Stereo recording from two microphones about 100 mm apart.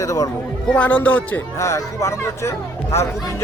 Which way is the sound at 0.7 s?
15° left (ahead or behind).